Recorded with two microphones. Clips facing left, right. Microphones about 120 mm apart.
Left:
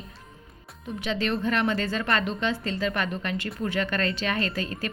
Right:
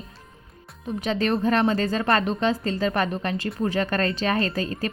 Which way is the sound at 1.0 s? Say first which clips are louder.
Right 4 dB; 40° right (ahead or behind).